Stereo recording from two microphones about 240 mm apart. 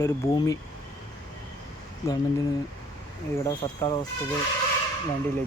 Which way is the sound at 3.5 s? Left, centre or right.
Centre.